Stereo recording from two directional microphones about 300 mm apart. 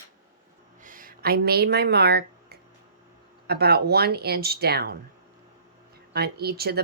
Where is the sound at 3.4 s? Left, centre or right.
Right.